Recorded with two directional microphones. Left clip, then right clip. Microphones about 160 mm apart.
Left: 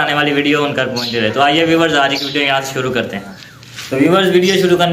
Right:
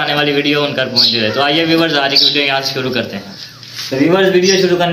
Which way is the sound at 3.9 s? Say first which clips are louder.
Left 1 dB; 20° left (ahead or behind).